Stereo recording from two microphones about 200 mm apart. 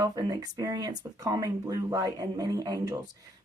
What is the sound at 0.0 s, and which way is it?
Speech, 20° right (ahead or behind).